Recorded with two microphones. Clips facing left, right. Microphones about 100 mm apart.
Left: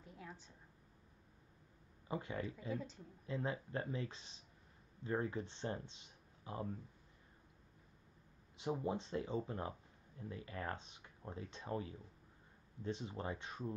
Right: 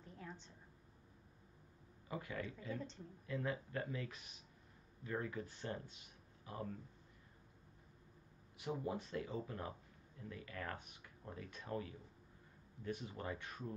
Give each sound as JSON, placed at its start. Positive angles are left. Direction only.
{"t": 0.0, "sound": "a sound", "side_deg": 5}
{"t": 2.0, "sound": "speech", "side_deg": 25}
{"t": 2.7, "sound": "speech", "side_deg": 5}
{"t": 3.3, "sound": "speech", "side_deg": 25}
{"t": 8.8, "sound": "speech", "side_deg": 25}